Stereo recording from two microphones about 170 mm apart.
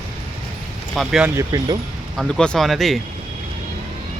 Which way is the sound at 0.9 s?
5° right (ahead or behind).